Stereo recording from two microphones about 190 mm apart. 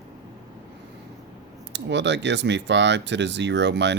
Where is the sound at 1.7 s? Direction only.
70° right (ahead or behind).